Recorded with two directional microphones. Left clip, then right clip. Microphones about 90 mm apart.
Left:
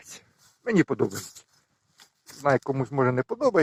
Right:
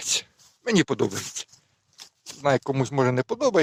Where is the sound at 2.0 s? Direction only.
15° right (ahead or behind).